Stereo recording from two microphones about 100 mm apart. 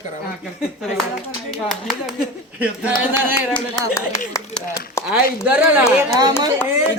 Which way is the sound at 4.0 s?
35° left (ahead or behind).